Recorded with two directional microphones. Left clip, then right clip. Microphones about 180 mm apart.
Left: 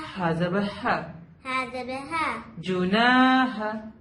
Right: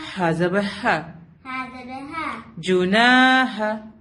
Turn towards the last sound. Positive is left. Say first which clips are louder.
# right 5 dB
turn(degrees=-40)  # may be behind; listen again after turning